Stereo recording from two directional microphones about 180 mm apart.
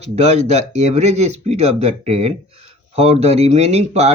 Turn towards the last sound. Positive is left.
turn(degrees=-40)  # may be behind; listen again after turning